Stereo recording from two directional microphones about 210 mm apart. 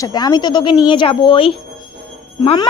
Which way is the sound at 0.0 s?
20° left (ahead or behind).